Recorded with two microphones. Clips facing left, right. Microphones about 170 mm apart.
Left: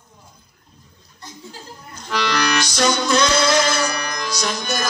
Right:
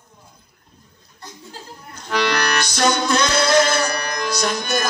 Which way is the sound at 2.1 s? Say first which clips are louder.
Right 1 dB; 55° right (ahead or behind).